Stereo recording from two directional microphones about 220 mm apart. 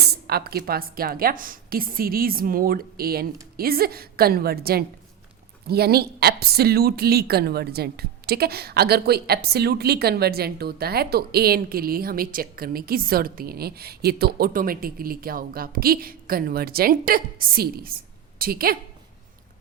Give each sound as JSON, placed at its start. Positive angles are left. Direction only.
{"t": 0.3, "sound": "a woman's voice", "side_deg": -45}